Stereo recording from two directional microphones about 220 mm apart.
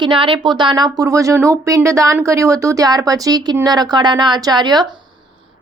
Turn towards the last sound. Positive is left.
turn(degrees=-20)  # may be behind; listen again after turning